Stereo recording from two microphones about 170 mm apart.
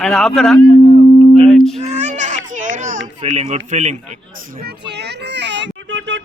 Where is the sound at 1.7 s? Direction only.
40° right (ahead or behind).